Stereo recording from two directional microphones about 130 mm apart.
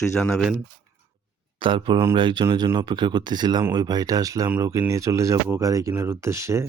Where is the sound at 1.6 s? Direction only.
40° right (ahead or behind).